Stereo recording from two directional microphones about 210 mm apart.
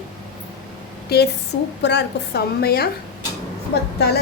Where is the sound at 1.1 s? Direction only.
50° left (ahead or behind).